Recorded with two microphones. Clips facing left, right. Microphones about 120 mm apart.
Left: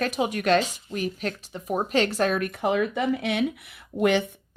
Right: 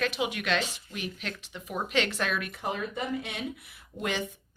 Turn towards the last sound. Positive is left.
turn(degrees=65)  # may be behind; listen again after turning